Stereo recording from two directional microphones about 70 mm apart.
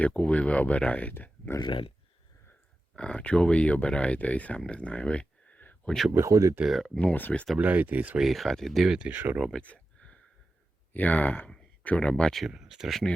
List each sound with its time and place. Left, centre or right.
0.0 s speech: centre
2.9 s speech: centre
5.9 s speech: centre
6.1 s speech: right
6.6 s speech: centre
7.0 s speech: left
7.6 s speech: right
8.2 s speech: centre
9.0 s speech: right
9.5 s a sound: centre
10.9 s speech: left
12.5 s speech: centre